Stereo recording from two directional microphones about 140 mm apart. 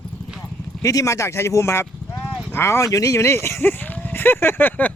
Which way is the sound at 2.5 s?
20° left (ahead or behind).